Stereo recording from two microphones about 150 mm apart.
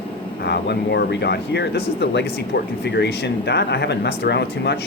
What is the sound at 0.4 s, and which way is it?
Speech, 90° left.